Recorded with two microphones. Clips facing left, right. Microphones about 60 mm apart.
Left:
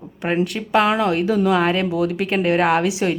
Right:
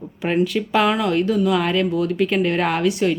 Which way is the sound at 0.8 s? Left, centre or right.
Centre.